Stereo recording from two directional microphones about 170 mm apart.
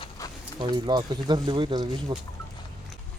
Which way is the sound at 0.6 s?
25° right (ahead or behind).